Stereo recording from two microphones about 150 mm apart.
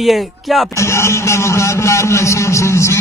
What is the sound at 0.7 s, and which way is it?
A man's voice, 20° left (ahead or behind).